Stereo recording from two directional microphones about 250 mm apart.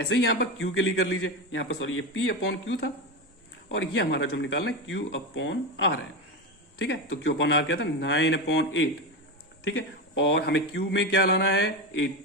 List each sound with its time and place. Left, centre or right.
0.1 s a man's voice: left
10.2 s a man's voice: left